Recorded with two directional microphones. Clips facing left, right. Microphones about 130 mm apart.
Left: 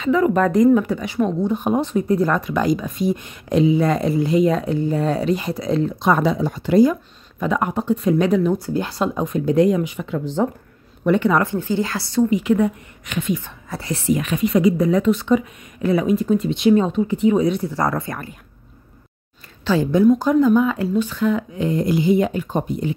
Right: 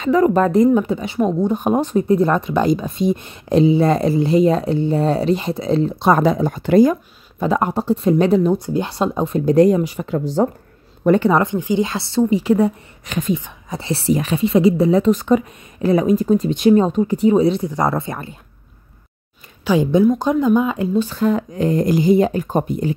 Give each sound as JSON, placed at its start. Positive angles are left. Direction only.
{"t": 0.0, "sound": "speech", "side_deg": -40}
{"t": 1.4, "sound": "speech", "side_deg": -45}
{"t": 2.0, "sound": "speech", "side_deg": -25}
{"t": 6.1, "sound": "speech", "side_deg": -45}
{"t": 7.3, "sound": "speech", "side_deg": -30}
{"t": 8.5, "sound": "speech", "side_deg": -20}
{"t": 13.4, "sound": "speech", "side_deg": -20}
{"t": 15.1, "sound": "speech", "side_deg": -45}
{"t": 19.6, "sound": "speech", "side_deg": -15}
{"t": 21.0, "sound": "speech", "side_deg": -35}